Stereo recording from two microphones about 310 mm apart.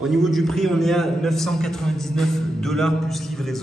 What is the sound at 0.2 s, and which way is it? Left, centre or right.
A man's voice, centre.